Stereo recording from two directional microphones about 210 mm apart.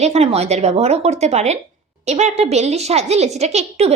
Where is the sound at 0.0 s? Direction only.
30° right (ahead or behind).